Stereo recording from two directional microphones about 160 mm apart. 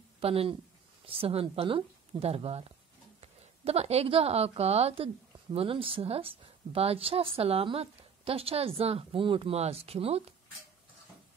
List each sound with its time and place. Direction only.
0.2 s a woman's voice: 35° right (ahead or behind)